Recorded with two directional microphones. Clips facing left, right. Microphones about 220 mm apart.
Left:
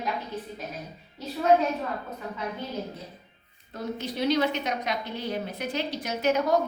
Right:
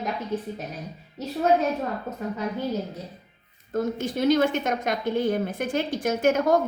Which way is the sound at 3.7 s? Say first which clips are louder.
Right 6 dB; 50° right (ahead or behind).